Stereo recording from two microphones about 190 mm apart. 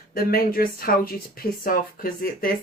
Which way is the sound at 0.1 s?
50° left (ahead or behind).